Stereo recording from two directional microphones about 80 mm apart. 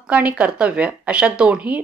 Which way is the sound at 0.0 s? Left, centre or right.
Centre.